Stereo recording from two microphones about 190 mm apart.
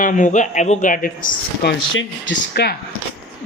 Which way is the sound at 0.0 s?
45° left (ahead or behind).